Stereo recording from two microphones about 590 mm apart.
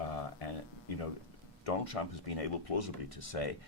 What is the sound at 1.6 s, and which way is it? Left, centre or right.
Speech, left.